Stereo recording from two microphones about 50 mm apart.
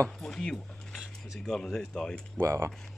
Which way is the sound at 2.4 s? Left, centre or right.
Right.